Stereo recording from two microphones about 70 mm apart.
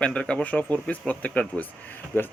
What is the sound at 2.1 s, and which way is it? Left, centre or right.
Speech, left.